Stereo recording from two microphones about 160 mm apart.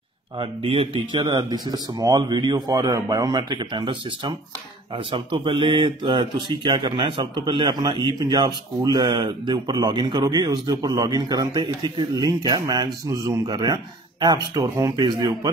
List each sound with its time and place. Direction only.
0.4 s speech: 35° right (ahead or behind)